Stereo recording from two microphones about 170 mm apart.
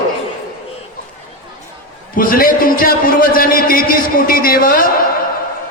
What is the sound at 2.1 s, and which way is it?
A man's voice, 55° left (ahead or behind).